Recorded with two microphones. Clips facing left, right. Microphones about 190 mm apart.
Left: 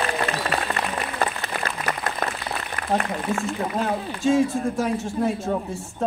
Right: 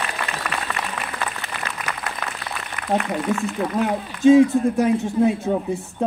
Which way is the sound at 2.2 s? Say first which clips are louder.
Left 6 dB; 40° left (ahead or behind).